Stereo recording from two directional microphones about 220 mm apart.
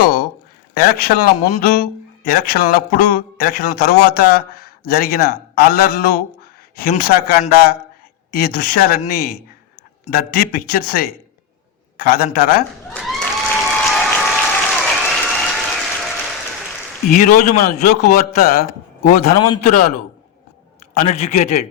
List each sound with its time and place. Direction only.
0.7 s speech: 45° left (ahead or behind)
12.9 s applause: centre (ahead or behind)
17.1 s a man's voice: 40° left (ahead or behind)
20.9 s a man's voice: 35° left (ahead or behind)